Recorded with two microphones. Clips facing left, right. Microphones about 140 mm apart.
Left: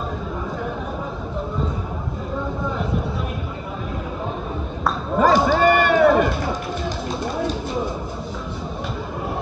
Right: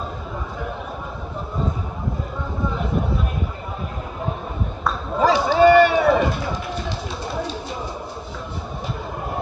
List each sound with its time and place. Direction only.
5.2 s run: 50° left (ahead or behind)